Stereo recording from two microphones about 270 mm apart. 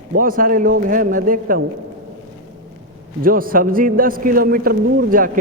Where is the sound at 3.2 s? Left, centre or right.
Right.